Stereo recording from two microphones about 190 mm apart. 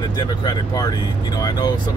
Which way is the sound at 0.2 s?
20° left (ahead or behind).